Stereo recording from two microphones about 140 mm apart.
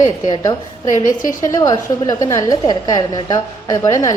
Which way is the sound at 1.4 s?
25° left (ahead or behind).